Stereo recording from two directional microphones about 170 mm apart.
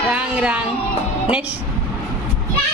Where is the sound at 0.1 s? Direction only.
5° right (ahead or behind).